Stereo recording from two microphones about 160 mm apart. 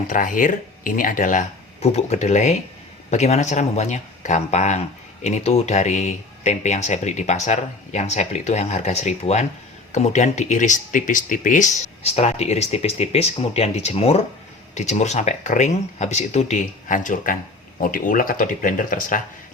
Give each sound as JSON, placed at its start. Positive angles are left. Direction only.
{"t": 0.1, "sound": "speech", "side_deg": 55}